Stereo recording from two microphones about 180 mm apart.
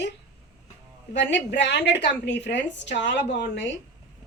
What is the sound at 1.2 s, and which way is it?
A woman's voice, 80° left.